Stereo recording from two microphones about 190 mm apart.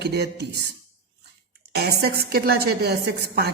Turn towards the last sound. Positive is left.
turn(degrees=-60)  # may be behind; listen again after turning